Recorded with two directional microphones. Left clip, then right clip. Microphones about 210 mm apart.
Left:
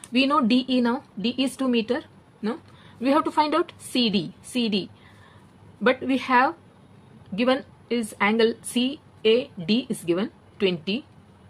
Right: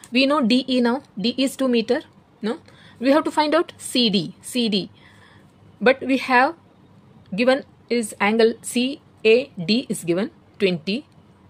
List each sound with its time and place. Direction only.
0.1 s speech: 35° right (ahead or behind)
5.9 s speech: 35° right (ahead or behind)